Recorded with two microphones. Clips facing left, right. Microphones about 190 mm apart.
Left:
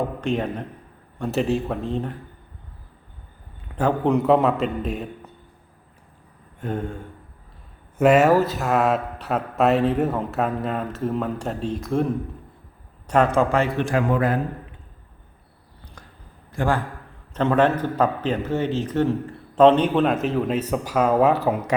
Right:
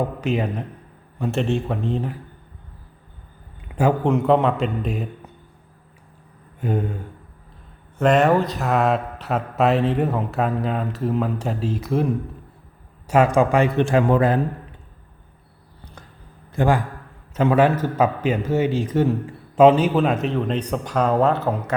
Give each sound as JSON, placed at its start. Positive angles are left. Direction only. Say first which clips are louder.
{"t": 0.2, "sound": "a man's voice", "louder": "right 1 dB", "side_deg": -5}
{"t": 3.8, "sound": "a man's voice", "louder": "right 1 dB", "side_deg": -5}
{"t": 6.6, "sound": "a man's voice", "louder": "right 3 dB", "side_deg": -5}
{"t": 7.9, "sound": "a man's voice", "louder": "left 1 dB", "side_deg": 5}
{"t": 13.1, "sound": "a man's voice", "louder": "right 2 dB", "side_deg": -10}
{"t": 13.8, "sound": "a man's voice", "louder": "right 3 dB", "side_deg": -25}
{"t": 16.5, "sound": "a man's voice", "louder": "right 3 dB", "side_deg": -20}
{"t": 17.3, "sound": "a man's voice", "louder": "right 2 dB", "side_deg": -5}